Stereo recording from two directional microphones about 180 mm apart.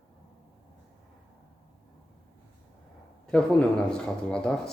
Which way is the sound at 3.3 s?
5° left (ahead or behind).